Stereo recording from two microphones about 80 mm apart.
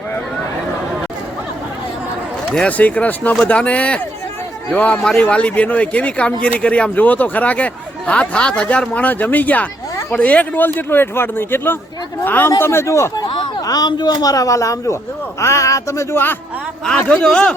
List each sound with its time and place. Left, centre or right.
2.5 s a man's voice: centre; by 13.1 s left
13.7 s speech: left
17.1 s speech: centre